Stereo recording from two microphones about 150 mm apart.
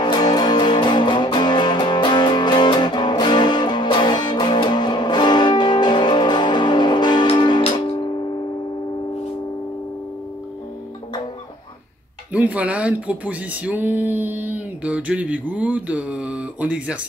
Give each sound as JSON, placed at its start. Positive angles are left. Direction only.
{"t": 0.0, "sound": "music", "side_deg": 30}
{"t": 12.3, "sound": "speech", "side_deg": -10}